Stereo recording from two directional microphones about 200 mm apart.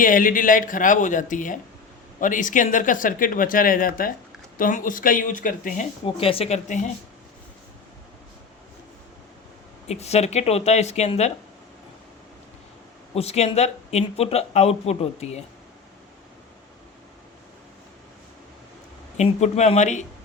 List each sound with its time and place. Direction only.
0.0 s speech: 45° left (ahead or behind)
6.1 s speech: 25° left (ahead or behind)
9.9 s speech: 30° left (ahead or behind)
13.1 s speech: 30° left (ahead or behind)
19.1 s speech: 35° left (ahead or behind)